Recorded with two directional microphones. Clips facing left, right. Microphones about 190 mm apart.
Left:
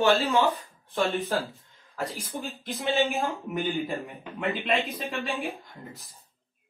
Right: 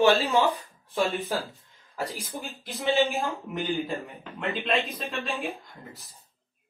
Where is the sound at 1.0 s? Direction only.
Centre (ahead or behind).